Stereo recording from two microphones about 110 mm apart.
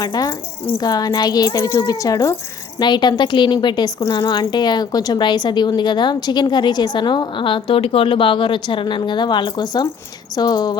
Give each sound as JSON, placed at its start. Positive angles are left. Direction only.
{"t": 0.0, "sound": "speech", "side_deg": 35}
{"t": 2.7, "sound": "a woman's voice", "side_deg": 40}